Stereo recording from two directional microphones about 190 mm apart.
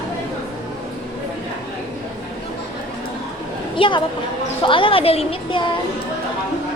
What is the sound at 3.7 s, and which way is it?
A woman's voice, 25° left (ahead or behind).